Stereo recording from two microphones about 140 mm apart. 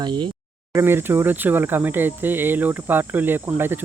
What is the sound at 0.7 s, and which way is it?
Speech, 20° right (ahead or behind).